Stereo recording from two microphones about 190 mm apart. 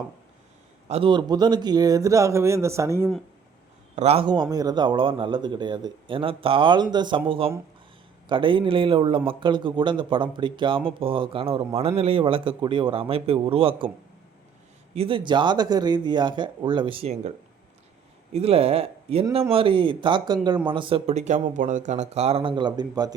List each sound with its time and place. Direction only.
0.9 s speech: 30° right (ahead or behind)
3.9 s a man's voice: 35° right (ahead or behind)
14.9 s a man's voice: 30° right (ahead or behind)
18.3 s a man's voice: 30° right (ahead or behind)